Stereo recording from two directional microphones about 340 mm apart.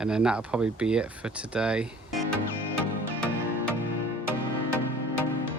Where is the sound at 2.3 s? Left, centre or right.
Left.